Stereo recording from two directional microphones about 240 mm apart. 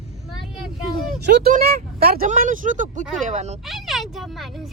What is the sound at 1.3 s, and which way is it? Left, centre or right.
Speech, right.